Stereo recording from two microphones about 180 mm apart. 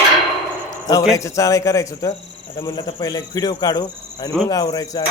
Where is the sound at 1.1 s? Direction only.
15° left (ahead or behind).